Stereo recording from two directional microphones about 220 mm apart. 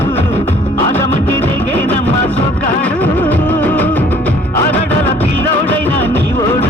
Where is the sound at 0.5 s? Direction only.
30° left (ahead or behind).